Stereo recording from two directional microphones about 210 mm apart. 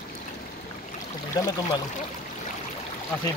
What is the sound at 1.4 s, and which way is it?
Speech, 15° left (ahead or behind).